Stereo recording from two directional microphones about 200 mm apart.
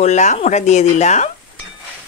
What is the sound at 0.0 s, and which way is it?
Speech, 35° left (ahead or behind).